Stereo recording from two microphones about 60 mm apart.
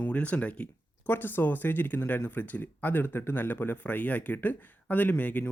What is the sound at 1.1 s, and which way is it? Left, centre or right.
Speech, left.